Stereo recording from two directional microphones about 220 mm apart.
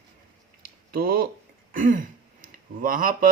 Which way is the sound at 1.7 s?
35° right (ahead or behind).